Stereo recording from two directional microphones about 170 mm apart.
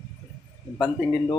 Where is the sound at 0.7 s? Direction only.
25° left (ahead or behind).